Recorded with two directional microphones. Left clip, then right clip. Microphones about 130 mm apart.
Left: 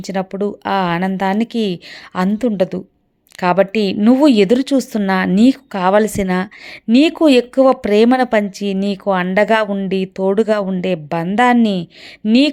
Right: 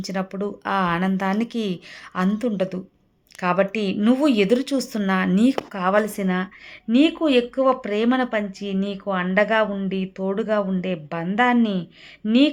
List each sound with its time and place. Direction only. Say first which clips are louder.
0.0 s speech: left 7 dB; 45° left (ahead or behind); by 9.2 s 90° left
9.2 s speech: left 4 dB; 45° left (ahead or behind)
10.2 s speech: left 7 dB; 65° left (ahead or behind)